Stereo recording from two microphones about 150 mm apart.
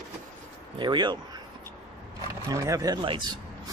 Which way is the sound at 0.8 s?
30° right (ahead or behind).